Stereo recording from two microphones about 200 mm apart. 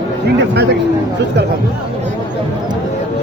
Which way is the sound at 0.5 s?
55° right (ahead or behind).